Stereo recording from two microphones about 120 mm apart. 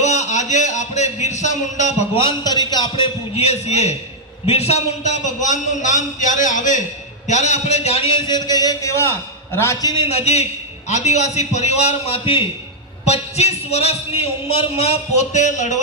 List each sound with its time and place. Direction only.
0.0 s a man's voice: 70° left (ahead or behind)
2.4 s a man's voice: 35° left (ahead or behind)
3.3 s a man's voice: 60° left (ahead or behind); by 6.8 s 90° left
7.2 s a man's voice: 75° left (ahead or behind); by 8.1 s 60° left (ahead or behind)
8.3 s a man's voice: 35° left (ahead or behind)
10.0 s a man's voice: 60° left (ahead or behind)
13.0 s a man's voice: 65° left (ahead or behind); by 15.8 s 90° left